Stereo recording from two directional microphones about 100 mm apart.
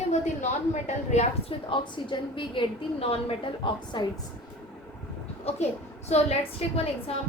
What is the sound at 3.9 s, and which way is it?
Speech, 50° left (ahead or behind).